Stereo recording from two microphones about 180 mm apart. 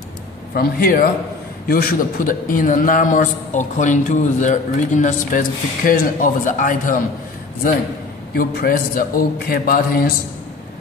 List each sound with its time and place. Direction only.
0.6 s a man's voice: 55° left (ahead or behind)
8.4 s a man's voice: 55° left (ahead or behind)